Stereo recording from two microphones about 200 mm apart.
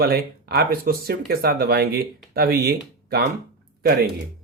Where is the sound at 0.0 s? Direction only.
50° right (ahead or behind).